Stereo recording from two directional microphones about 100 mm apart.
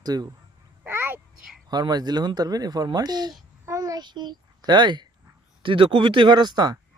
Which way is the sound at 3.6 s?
35° right (ahead or behind).